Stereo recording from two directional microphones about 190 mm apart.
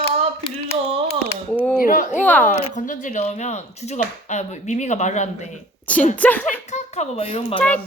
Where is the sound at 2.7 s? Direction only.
45° left (ahead or behind).